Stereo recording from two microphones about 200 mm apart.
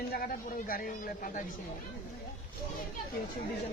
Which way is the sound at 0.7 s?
45° left (ahead or behind).